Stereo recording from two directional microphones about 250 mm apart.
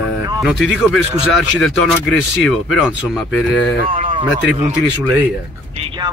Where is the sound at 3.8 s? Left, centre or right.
Right.